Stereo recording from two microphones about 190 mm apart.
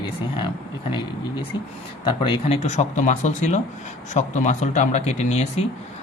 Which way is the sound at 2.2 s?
30° left (ahead or behind).